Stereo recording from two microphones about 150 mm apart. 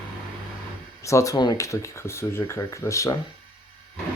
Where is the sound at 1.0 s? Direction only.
20° left (ahead or behind).